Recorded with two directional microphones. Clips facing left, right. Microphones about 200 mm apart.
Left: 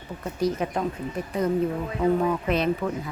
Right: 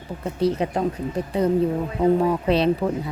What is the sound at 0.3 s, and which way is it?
Speech, 30° right (ahead or behind).